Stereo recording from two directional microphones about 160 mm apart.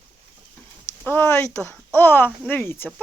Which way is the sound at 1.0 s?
15° left (ahead or behind).